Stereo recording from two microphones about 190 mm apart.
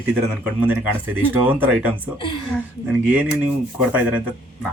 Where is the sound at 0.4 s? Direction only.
10° right (ahead or behind).